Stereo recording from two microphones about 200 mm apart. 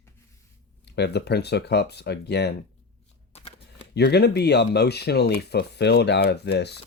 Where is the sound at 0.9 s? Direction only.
55° left (ahead or behind).